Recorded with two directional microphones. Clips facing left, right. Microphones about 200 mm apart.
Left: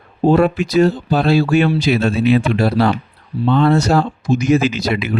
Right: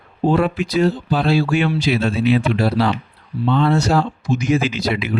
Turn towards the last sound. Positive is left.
turn(degrees=45)  # may be behind; listen again after turning